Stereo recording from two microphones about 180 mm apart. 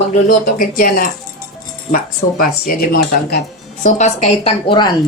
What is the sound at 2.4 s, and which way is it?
Speech, 55° left (ahead or behind).